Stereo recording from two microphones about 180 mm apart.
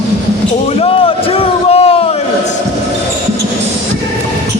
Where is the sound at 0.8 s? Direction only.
30° left (ahead or behind).